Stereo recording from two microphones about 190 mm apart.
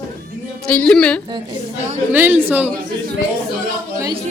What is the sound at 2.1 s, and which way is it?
Speech, 10° right (ahead or behind).